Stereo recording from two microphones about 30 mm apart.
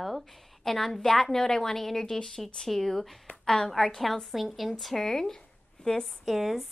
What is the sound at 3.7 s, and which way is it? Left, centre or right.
A woman's voice, centre.